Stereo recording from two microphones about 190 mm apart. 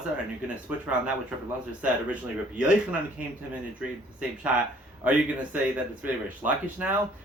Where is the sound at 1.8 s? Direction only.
5° right (ahead or behind).